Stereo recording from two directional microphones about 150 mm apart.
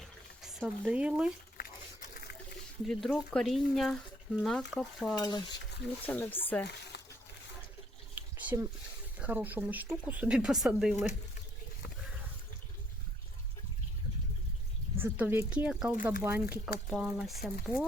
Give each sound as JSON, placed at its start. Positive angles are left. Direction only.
{"t": 0.0, "sound": "bathtub", "side_deg": 0}
{"t": 1.5, "sound": "a sound", "side_deg": 75}
{"t": 2.8, "sound": "speech", "side_deg": 5}
{"t": 5.1, "sound": "stir", "side_deg": 30}
{"t": 6.1, "sound": "speech", "side_deg": 15}
{"t": 8.1, "sound": "a sound", "side_deg": -10}
{"t": 9.1, "sound": "speech", "side_deg": -10}
{"t": 14.9, "sound": "speech", "side_deg": -10}
{"t": 16.9, "sound": "speech", "side_deg": -5}